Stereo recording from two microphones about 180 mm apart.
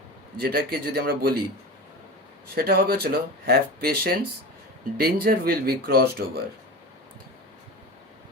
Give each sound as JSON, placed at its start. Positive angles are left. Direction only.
{"t": 0.3, "sound": "speech", "side_deg": -60}
{"t": 2.6, "sound": "speech", "side_deg": -55}